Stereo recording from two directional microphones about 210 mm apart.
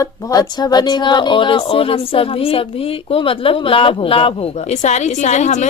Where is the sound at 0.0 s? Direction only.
15° left (ahead or behind).